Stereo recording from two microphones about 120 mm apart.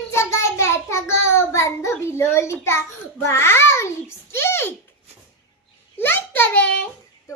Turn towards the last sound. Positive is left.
turn(degrees=15)  # may be behind; listen again after turning